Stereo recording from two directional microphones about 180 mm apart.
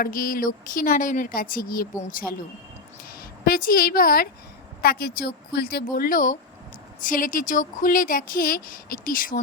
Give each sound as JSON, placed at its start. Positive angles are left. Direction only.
{"t": 0.0, "sound": "a woman's voice", "side_deg": 50}
{"t": 3.1, "sound": "a woman's voice", "side_deg": 55}